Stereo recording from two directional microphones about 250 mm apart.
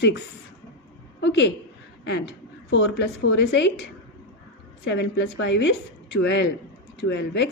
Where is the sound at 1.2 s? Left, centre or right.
Left.